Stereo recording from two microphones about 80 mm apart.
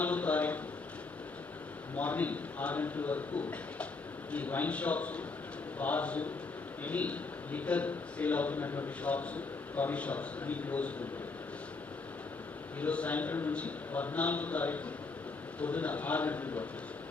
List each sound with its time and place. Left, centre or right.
0.0 s a sound: centre
2.0 s a man's voice: centre
12.8 s a man's voice: centre